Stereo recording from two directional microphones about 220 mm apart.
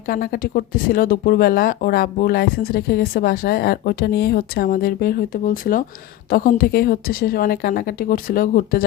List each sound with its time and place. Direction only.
0.1 s a woman's voice: 40° left (ahead or behind)